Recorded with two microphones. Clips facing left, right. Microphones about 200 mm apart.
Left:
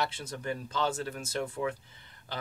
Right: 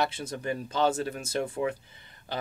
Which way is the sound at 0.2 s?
20° right (ahead or behind).